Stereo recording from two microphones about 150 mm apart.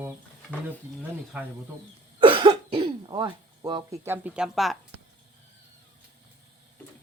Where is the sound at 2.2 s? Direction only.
35° right (ahead or behind).